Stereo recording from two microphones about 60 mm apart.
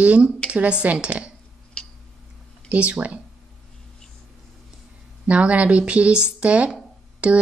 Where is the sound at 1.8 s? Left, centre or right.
Centre.